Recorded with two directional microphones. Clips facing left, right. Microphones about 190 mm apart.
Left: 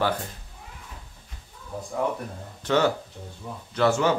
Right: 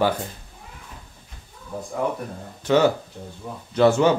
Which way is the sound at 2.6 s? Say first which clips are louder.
Right 4 dB; 10° right (ahead or behind).